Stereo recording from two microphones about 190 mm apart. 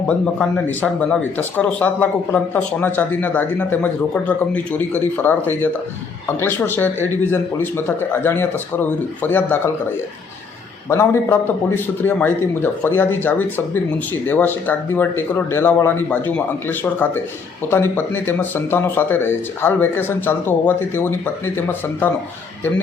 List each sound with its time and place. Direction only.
0.1 s speech: 5° left (ahead or behind)
10.8 s speech: 15° left (ahead or behind)